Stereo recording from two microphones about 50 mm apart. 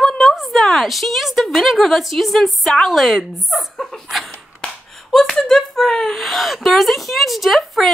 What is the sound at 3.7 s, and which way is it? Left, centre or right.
Dog, centre.